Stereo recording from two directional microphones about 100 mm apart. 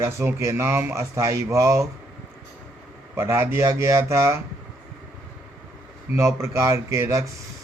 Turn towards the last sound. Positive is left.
turn(degrees=-30)  # may be behind; listen again after turning